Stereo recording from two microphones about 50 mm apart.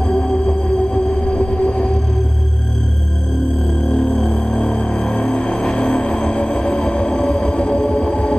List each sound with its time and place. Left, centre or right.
0.1 s vehicle: centre
3.9 s music: centre